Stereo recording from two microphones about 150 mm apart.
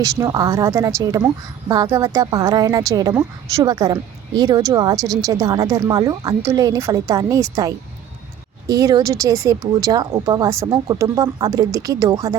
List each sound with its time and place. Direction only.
0.0 s speech: 20° right (ahead or behind)